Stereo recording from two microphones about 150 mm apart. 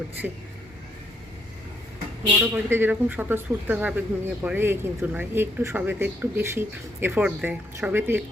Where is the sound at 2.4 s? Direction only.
15° right (ahead or behind).